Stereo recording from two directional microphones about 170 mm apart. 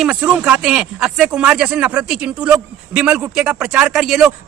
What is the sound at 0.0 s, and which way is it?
Speech, 5° right (ahead or behind).